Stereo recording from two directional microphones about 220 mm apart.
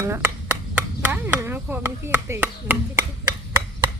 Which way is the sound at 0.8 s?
10° right (ahead or behind).